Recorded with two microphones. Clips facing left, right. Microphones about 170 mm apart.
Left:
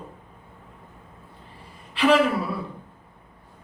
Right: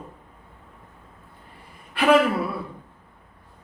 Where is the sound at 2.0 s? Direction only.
55° right (ahead or behind).